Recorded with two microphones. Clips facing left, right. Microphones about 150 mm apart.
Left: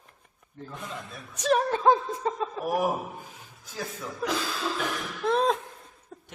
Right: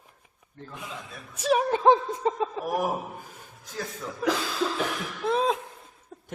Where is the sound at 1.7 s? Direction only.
20° right (ahead or behind).